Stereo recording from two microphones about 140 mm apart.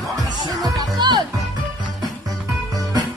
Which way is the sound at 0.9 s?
35° right (ahead or behind).